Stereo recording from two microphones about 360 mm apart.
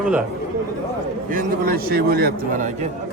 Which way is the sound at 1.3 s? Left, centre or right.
Right.